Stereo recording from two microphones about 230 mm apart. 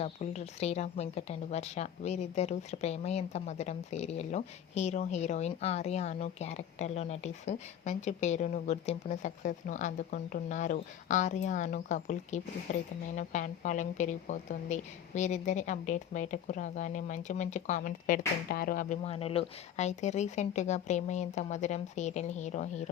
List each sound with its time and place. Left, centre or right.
0.0 s a woman's voice: left